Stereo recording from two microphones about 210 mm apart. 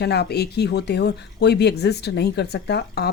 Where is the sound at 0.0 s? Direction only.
50° left (ahead or behind).